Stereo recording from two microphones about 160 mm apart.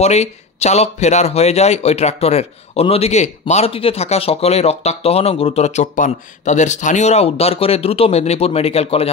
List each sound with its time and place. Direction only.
0.0 s speech: 40° left (ahead or behind)